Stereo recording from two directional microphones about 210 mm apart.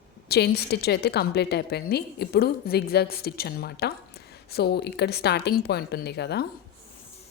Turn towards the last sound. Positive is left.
turn(degrees=50)  # may be behind; listen again after turning